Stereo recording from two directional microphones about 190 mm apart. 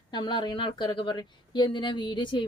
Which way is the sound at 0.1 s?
25° left (ahead or behind).